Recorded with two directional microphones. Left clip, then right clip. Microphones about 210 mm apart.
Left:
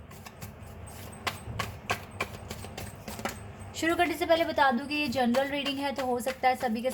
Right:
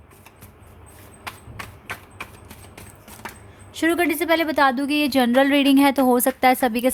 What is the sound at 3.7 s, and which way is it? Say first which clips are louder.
A woman's voice: right 7 dB; 50° right (ahead or behind).